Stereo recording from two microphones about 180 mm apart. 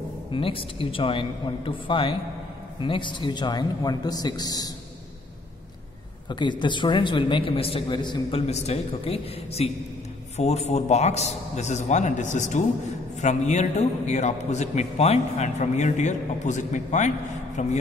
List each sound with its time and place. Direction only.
0.3 s speech: 30° left (ahead or behind)
6.2 s speech: 25° left (ahead or behind)
8.5 s a man's voice: 35° left (ahead or behind)